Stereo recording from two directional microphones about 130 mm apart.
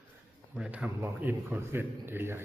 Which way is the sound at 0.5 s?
10° right (ahead or behind).